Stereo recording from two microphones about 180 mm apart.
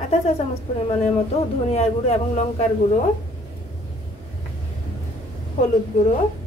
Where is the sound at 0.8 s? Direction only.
35° left (ahead or behind).